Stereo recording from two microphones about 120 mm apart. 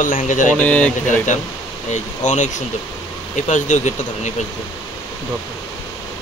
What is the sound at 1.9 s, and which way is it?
Speech, 90° left.